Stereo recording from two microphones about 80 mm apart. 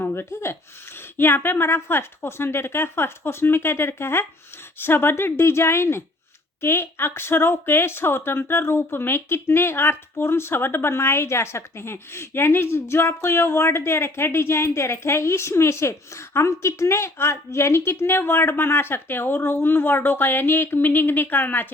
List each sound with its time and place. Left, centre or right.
0.0 s a woman's voice: left